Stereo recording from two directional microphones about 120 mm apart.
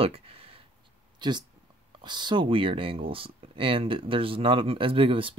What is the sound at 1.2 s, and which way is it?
Speech, 40° right (ahead or behind).